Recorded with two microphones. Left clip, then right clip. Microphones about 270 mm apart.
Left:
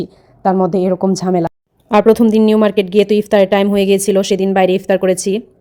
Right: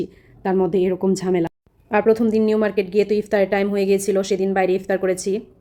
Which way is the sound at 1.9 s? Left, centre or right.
Left.